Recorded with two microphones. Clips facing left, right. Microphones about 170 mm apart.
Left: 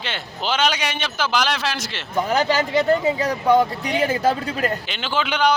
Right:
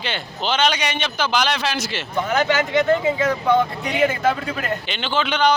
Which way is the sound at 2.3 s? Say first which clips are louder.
Right 1 dB; 35° left (ahead or behind).